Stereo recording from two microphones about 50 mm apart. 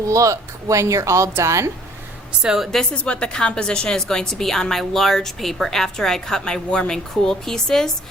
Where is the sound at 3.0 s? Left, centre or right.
Left.